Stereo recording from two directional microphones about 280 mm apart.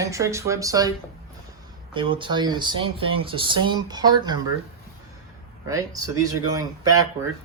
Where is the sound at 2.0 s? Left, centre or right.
Centre.